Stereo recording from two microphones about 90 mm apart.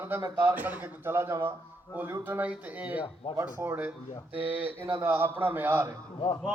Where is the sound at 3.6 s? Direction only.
20° right (ahead or behind).